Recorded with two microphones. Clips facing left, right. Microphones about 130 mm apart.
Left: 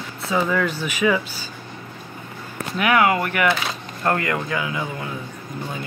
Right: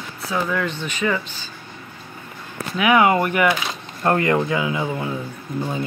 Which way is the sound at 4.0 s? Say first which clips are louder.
Right 4 dB; 25° right (ahead or behind).